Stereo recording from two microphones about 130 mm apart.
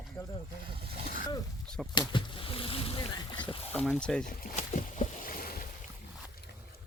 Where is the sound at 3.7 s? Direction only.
5° left (ahead or behind).